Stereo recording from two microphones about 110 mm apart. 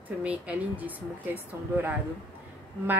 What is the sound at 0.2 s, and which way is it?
Speech, 10° right (ahead or behind).